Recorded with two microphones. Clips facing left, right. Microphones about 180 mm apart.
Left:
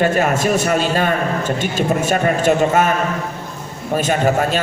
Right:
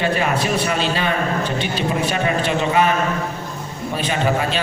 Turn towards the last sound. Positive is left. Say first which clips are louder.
# left 4 dB
turn(degrees=45)  # may be behind; listen again after turning